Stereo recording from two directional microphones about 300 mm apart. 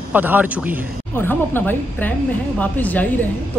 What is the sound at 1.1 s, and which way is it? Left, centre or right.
Speech, centre.